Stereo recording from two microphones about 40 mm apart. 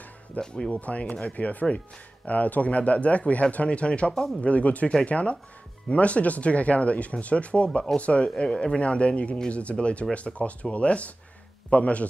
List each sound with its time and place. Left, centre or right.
0.4 s speech: centre
0.7 s speech: left
4.1 s speech: centre
4.4 s speech: left